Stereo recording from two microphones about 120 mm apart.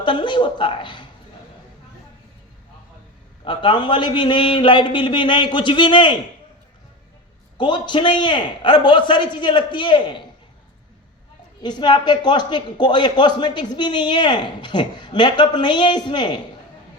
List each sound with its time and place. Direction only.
0.0 s speech: 40° left (ahead or behind)
3.4 s speech: 40° left (ahead or behind)
7.6 s speech: 40° left (ahead or behind)
11.6 s speech: 40° left (ahead or behind)